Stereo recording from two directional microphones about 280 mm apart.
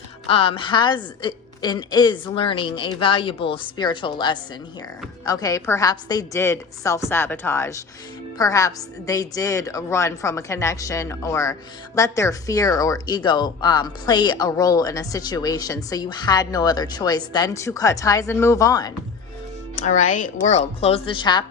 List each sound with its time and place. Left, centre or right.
0.3 s speech: centre
19.7 s a woman's voice: left